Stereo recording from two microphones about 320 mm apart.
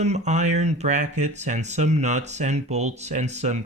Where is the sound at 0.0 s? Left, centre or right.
Right.